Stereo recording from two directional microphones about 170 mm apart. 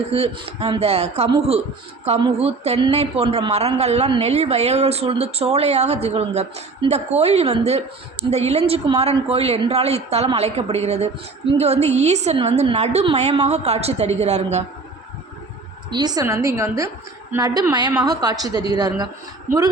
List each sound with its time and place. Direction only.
0.1 s a woman's voice: 35° right (ahead or behind)
15.9 s a woman's voice: 25° right (ahead or behind)